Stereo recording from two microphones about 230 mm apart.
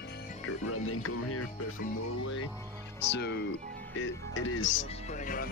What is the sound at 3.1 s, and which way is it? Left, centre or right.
Speech, left.